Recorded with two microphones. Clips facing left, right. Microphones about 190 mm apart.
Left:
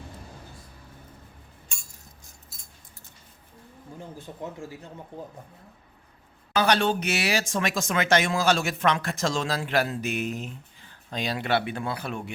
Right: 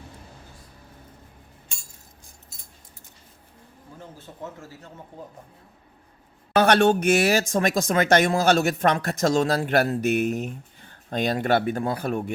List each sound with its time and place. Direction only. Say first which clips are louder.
6.5 s speech: right 5 dB; 55° right (ahead or behind)